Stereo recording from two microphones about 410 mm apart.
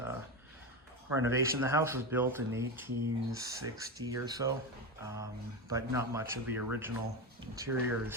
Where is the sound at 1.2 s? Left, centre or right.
Centre.